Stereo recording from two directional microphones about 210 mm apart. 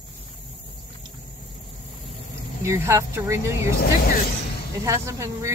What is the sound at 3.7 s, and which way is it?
Speech, 45° left (ahead or behind).